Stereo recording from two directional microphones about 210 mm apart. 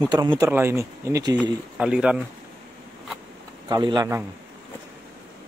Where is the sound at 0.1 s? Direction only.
20° right (ahead or behind).